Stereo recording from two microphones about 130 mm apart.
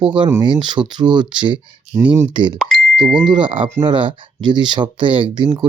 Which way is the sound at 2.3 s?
40° right (ahead or behind).